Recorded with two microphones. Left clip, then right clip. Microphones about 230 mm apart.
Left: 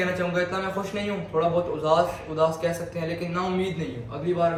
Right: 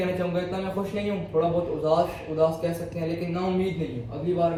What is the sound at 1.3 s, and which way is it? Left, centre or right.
Speech, left.